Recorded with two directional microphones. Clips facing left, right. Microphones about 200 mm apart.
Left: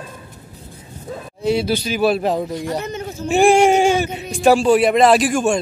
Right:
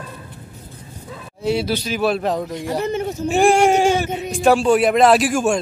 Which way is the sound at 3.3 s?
Centre (ahead or behind).